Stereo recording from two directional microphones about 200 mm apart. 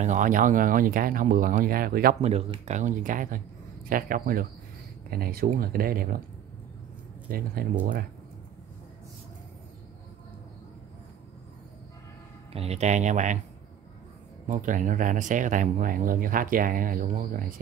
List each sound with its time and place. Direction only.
0.0 s speech: 40° right (ahead or behind)
2.2 s speech: 30° right (ahead or behind)
7.2 s speech: 45° right (ahead or behind)
12.5 s speech: 30° right (ahead or behind)
14.5 s speech: 40° right (ahead or behind)